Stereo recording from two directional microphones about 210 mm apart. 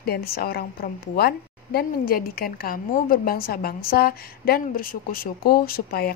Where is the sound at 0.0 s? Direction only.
45° left (ahead or behind).